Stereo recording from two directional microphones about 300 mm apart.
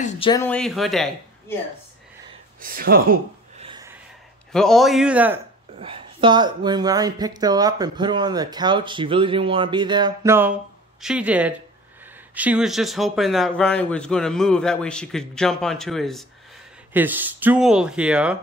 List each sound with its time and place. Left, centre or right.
0.0 s speech: centre
2.6 s speech: right
3.6 s a sound: centre
4.5 s a man's voice: centre
5.8 s a man's voice: centre